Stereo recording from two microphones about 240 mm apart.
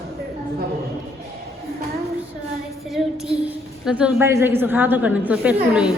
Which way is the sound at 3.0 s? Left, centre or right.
Centre.